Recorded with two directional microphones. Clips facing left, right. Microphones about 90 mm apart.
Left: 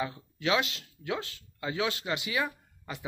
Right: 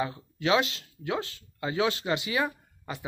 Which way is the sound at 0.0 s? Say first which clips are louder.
Right 2 dB; 30° right (ahead or behind).